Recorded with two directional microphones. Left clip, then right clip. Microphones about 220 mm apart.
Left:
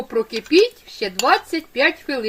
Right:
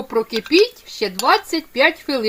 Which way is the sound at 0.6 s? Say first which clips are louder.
Right 1 dB; 50° right (ahead or behind).